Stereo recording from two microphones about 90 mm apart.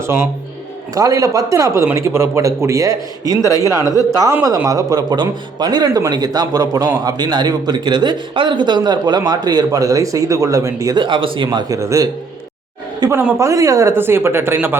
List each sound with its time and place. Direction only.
0.9 s speech: 40° right (ahead or behind)
3.6 s a man's voice: 40° left (ahead or behind)
3.8 s a man's voice: 40° right (ahead or behind)
10.9 s speech: 60° right (ahead or behind)
11.7 s speech: 35° right (ahead or behind)
13.0 s a man's voice: 50° right (ahead or behind)
13.4 s speech: 35° right (ahead or behind)
13.9 s speech: 25° right (ahead or behind)